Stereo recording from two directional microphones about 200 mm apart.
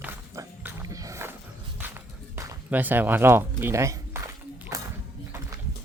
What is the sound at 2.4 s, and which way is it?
Speech, 10° right (ahead or behind).